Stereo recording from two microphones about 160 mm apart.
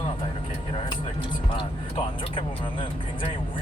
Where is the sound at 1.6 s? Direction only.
30° left (ahead or behind).